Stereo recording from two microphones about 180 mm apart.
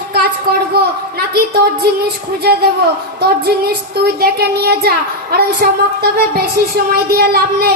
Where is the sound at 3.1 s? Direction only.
60° right (ahead or behind).